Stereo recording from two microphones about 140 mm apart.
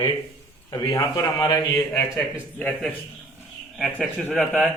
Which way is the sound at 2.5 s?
10° left (ahead or behind).